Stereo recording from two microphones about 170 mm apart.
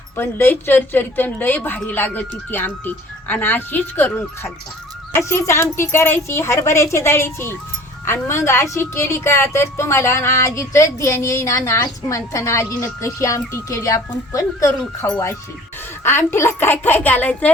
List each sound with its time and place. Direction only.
0.2 s a woman's voice: 15° left (ahead or behind)